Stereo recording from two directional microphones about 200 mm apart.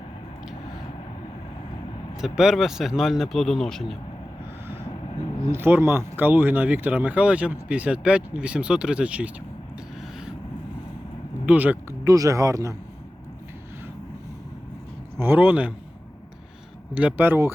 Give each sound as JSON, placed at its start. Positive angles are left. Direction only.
{"t": 2.1, "sound": "speech", "side_deg": -5}
{"t": 5.5, "sound": "speech", "side_deg": -10}
{"t": 11.4, "sound": "speech", "side_deg": -10}
{"t": 15.2, "sound": "speech", "side_deg": -10}
{"t": 16.9, "sound": "speech", "side_deg": -5}